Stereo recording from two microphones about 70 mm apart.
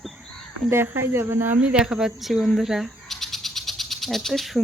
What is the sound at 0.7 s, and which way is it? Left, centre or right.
Speech, right.